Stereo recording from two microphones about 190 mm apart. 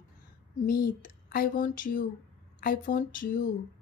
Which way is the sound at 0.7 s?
50° left (ahead or behind).